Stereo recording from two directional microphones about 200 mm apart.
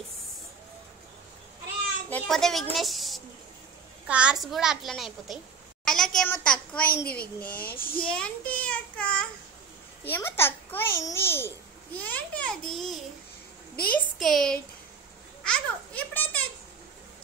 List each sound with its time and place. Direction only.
2.0 s a child's voice: 5° left (ahead or behind)
13.8 s a child's voice: 5° left (ahead or behind)